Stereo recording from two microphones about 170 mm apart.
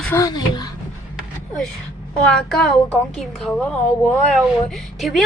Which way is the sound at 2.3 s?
5° left (ahead or behind).